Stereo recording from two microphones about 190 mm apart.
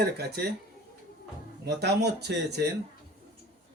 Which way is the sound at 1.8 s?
60° right (ahead or behind).